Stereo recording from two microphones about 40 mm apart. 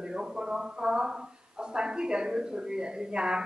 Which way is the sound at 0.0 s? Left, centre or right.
Centre.